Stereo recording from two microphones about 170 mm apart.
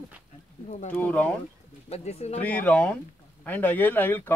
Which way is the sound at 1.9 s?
40° left (ahead or behind).